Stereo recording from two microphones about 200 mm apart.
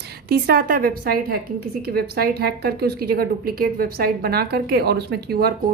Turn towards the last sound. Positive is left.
turn(degrees=-50)  # may be behind; listen again after turning